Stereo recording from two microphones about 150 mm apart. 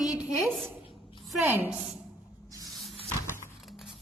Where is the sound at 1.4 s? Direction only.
10° right (ahead or behind).